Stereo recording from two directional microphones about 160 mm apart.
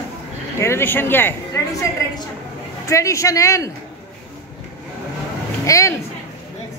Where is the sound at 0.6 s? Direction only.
15° left (ahead or behind).